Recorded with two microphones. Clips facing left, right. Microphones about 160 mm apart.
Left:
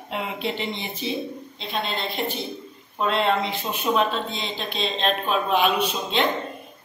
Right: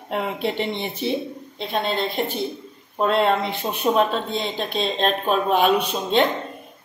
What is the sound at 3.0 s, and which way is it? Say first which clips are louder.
Speech: right 3 dB; 50° right (ahead or behind).